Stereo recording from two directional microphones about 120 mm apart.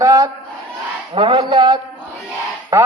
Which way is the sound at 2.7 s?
25° right (ahead or behind).